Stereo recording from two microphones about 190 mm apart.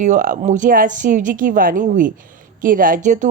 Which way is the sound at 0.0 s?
45° right (ahead or behind).